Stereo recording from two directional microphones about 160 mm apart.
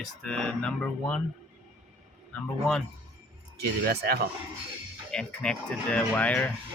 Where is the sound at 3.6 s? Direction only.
75° right (ahead or behind).